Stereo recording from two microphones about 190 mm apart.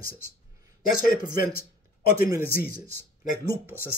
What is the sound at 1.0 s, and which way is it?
Speech, 45° left (ahead or behind).